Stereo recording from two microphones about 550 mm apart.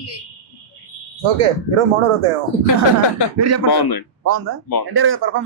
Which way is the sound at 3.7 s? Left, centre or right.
Left.